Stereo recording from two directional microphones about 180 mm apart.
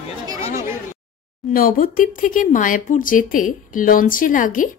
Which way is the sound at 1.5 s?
50° left (ahead or behind).